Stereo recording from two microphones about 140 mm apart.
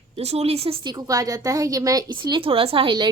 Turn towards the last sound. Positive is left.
turn(degrees=-35)  # may be behind; listen again after turning